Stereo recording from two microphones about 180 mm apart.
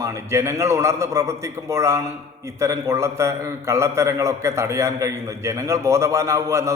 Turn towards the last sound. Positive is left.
turn(degrees=-15)  # may be behind; listen again after turning